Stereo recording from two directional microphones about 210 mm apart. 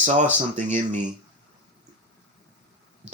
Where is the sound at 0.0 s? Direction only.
35° right (ahead or behind).